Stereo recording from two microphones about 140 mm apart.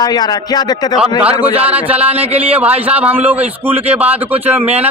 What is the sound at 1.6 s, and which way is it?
Speech, 10° right (ahead or behind).